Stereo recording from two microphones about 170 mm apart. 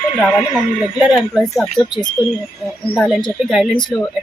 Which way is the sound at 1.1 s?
Centre (ahead or behind).